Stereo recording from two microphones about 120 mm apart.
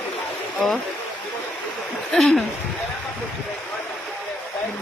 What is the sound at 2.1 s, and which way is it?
Speech, 5° left (ahead or behind).